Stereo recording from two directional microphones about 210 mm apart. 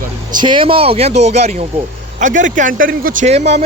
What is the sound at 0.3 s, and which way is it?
A man's voice, 20° right (ahead or behind).